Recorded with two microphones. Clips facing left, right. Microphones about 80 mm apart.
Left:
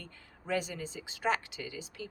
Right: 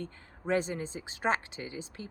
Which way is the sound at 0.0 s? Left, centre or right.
Right.